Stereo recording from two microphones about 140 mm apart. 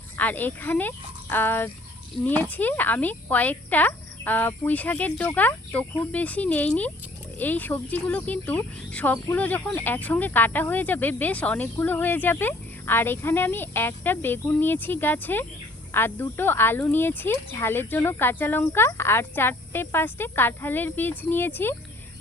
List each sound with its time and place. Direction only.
0.2 s speech: 10° left (ahead or behind)